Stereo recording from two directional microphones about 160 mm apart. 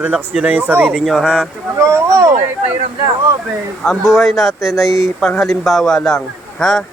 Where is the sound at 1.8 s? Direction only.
15° right (ahead or behind).